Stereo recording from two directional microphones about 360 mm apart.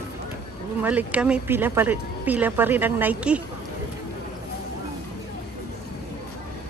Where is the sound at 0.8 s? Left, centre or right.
Centre.